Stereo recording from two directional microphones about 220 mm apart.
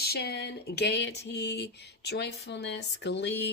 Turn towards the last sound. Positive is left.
turn(degrees=50)  # may be behind; listen again after turning